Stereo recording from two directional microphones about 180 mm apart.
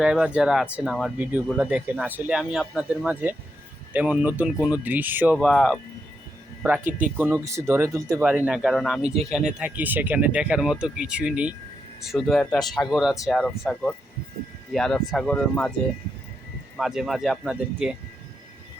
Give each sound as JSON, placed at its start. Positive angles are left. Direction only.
{"t": 0.0, "sound": "speech", "side_deg": -5}
{"t": 5.4, "sound": "speech", "side_deg": 5}
{"t": 14.7, "sound": "speech", "side_deg": 0}
{"t": 16.7, "sound": "speech", "side_deg": 0}